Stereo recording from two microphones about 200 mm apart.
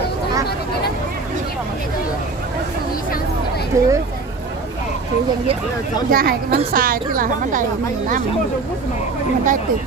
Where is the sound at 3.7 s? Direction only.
15° right (ahead or behind).